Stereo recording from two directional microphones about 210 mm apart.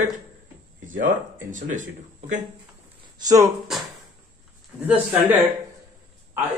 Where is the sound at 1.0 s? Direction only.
40° right (ahead or behind).